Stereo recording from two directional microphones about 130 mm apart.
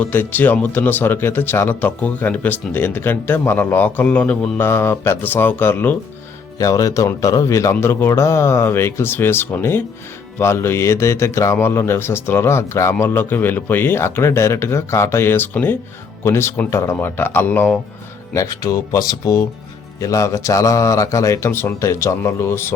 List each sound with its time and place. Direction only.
0.0 s speech: 15° left (ahead or behind)
6.6 s speech: 25° left (ahead or behind)
18.3 s speech: 25° left (ahead or behind)